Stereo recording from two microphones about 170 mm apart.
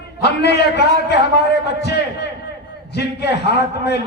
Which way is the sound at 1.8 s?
80° left.